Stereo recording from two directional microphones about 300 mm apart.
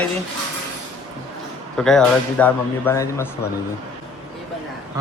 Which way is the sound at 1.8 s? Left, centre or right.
Centre.